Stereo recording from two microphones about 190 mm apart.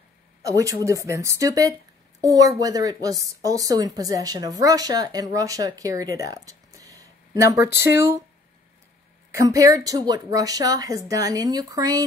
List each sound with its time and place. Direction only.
0.4 s a woman's voice: 15° right (ahead or behind)
9.3 s a woman's voice: 15° right (ahead or behind)